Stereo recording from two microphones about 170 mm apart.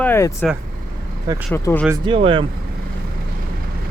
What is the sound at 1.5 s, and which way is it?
Speech, 10° left (ahead or behind).